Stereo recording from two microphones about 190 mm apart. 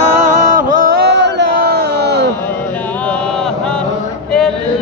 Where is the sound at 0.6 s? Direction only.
55° right (ahead or behind).